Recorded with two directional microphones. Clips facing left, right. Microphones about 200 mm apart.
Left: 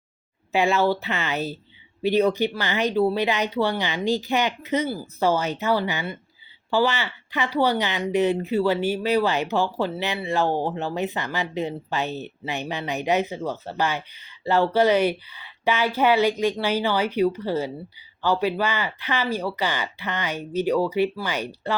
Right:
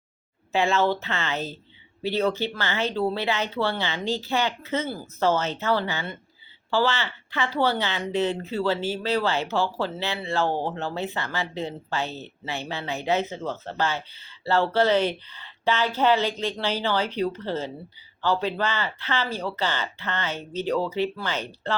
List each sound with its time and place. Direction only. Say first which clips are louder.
0.5 s speech: left 2 dB; 15° left (ahead or behind)